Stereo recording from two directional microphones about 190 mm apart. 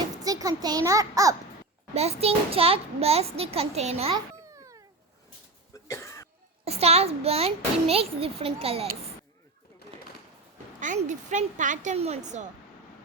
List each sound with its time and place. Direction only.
0.3 s a child's voice: 20° right (ahead or behind)
1.9 s a child's voice: 35° right (ahead or behind)
4.1 s babbling: 15° right (ahead or behind)
5.7 s cough: 15° left (ahead or behind)
6.7 s a child's voice: 35° right (ahead or behind)
10.8 s a child's voice: 40° right (ahead or behind)